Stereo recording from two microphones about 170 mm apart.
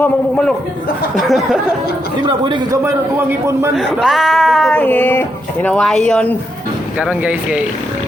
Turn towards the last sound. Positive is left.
turn(degrees=-5)  # may be behind; listen again after turning